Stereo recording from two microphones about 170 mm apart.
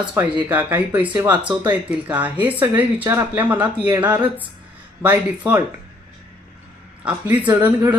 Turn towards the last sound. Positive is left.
turn(degrees=-10)  # may be behind; listen again after turning